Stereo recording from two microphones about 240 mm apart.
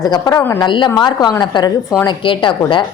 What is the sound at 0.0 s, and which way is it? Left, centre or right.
A woman's voice, centre.